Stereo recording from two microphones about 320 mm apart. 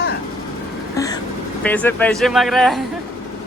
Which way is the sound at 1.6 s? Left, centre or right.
Centre.